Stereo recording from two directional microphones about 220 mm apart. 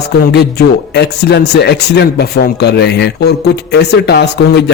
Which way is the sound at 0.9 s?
50° left (ahead or behind).